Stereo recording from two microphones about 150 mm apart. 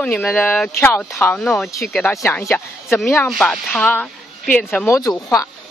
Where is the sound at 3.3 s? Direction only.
Centre (ahead or behind).